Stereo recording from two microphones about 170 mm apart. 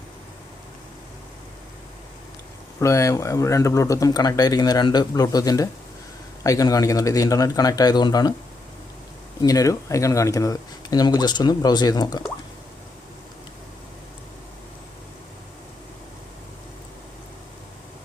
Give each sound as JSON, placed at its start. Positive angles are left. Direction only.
{"t": 2.8, "sound": "speech", "side_deg": 20}
{"t": 9.4, "sound": "speech", "side_deg": 20}